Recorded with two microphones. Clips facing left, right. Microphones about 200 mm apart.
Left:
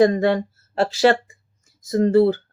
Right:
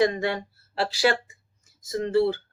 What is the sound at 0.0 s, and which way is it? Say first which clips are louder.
Speech: left 7 dB; 50° left (ahead or behind).